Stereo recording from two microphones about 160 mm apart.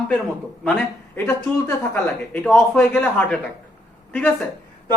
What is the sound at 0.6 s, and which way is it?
A man's voice, 10° left (ahead or behind).